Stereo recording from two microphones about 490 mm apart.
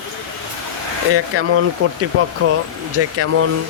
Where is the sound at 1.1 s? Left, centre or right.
Right.